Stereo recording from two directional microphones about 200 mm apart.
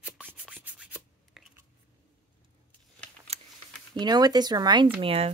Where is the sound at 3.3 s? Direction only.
30° right (ahead or behind).